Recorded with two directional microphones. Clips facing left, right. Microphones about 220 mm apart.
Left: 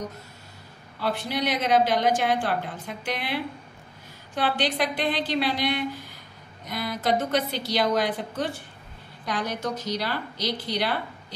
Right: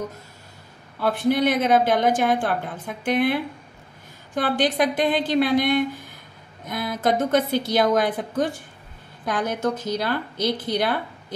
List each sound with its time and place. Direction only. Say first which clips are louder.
1.0 s a woman's voice: right 7 dB; 50° right (ahead or behind)
4.4 s a woman's voice: right 4 dB; 50° right (ahead or behind)